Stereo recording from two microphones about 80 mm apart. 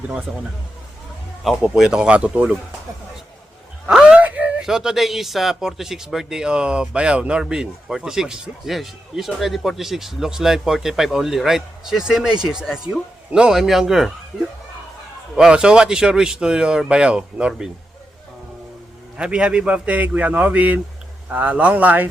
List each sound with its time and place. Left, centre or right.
0.3 s speech: centre
1.5 s speech: centre
3.8 s gasp: centre
4.6 s speech: centre
15.4 s speech: centre
19.1 s speech: centre